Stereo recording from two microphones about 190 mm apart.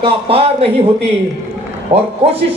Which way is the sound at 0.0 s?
30° right (ahead or behind).